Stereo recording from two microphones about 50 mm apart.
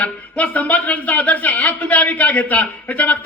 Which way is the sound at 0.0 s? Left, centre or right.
Left.